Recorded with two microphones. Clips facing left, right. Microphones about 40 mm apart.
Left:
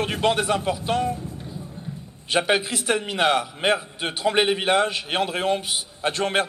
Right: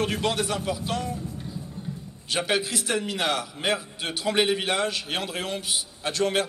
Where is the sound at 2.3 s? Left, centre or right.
Left.